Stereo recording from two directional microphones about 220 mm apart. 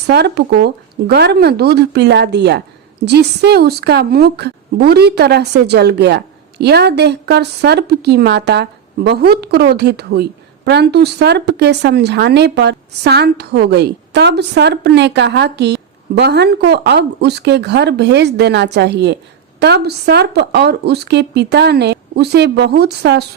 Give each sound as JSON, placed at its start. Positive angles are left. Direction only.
{"t": 0.1, "sound": "speech", "side_deg": -45}